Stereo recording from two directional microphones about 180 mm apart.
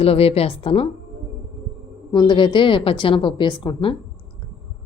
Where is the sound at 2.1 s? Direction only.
25° left (ahead or behind).